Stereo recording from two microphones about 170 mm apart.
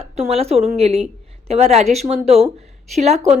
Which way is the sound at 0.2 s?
35° right (ahead or behind).